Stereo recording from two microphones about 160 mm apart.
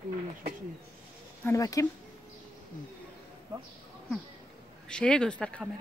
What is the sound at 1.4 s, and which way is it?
Speech, 20° left (ahead or behind).